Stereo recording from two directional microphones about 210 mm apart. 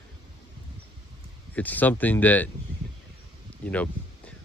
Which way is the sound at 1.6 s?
10° left (ahead or behind).